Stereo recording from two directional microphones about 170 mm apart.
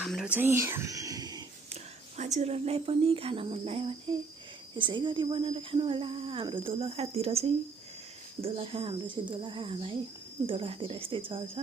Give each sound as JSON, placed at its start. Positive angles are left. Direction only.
{"t": 0.0, "sound": "whispering", "side_deg": 0}
{"t": 0.3, "sound": "speech", "side_deg": -15}
{"t": 1.7, "sound": "speech", "side_deg": -45}